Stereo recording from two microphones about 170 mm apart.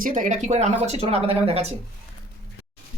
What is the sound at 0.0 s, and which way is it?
Speech, 50° right (ahead or behind).